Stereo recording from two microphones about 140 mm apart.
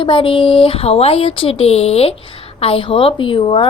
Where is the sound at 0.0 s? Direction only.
40° left (ahead or behind).